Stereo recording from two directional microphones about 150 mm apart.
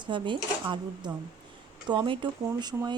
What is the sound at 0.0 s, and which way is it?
Speech, 30° right (ahead or behind).